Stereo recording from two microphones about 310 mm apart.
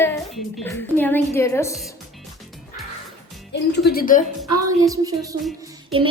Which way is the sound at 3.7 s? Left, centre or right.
Left.